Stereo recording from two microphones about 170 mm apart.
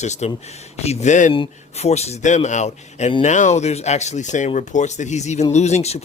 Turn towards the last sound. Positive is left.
turn(degrees=40)  # may be behind; listen again after turning